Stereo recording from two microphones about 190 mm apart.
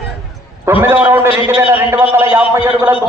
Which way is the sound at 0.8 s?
10° right (ahead or behind).